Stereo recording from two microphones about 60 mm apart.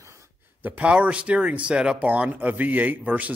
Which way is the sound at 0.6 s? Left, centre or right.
Right.